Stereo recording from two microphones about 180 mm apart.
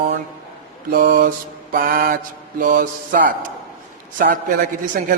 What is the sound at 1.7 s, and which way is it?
A man's voice, 50° right (ahead or behind).